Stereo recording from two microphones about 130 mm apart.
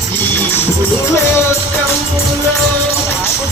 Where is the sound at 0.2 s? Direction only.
15° left (ahead or behind).